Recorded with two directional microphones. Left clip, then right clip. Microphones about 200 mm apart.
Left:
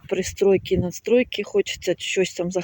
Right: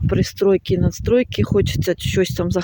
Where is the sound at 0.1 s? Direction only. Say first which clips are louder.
Right 2 dB; 15° right (ahead or behind).